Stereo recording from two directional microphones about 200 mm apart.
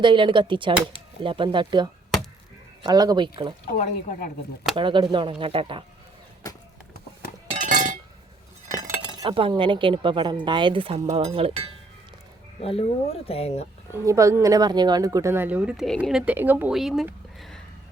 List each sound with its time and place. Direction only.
0.0 s a woman's voice: 25° right (ahead or behind)
4.8 s a woman's voice: 25° right (ahead or behind)
7.5 s chink: 40° right (ahead or behind)
8.7 s chink: 15° right (ahead or behind)
9.2 s a woman's voice: 25° right (ahead or behind)
12.6 s speech: 30° left (ahead or behind)
14.0 s speech: 15° right (ahead or behind)